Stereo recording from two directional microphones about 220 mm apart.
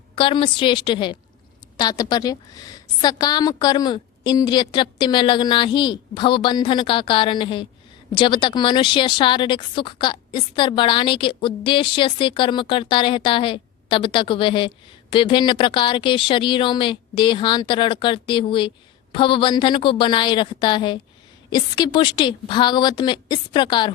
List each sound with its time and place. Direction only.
0.2 s a woman's voice: 25° left (ahead or behind)